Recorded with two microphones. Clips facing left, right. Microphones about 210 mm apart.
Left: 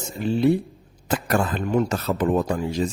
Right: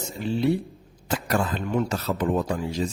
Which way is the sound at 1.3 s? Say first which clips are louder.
Left 3 dB; 50° left (ahead or behind).